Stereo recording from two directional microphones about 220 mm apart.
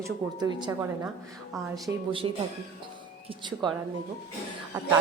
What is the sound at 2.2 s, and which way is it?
Speech, 20° right (ahead or behind).